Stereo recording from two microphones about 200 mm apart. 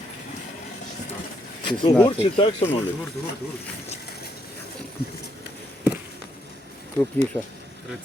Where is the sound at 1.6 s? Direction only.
25° left (ahead or behind).